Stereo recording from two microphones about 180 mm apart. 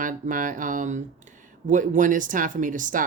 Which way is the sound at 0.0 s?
50° right (ahead or behind).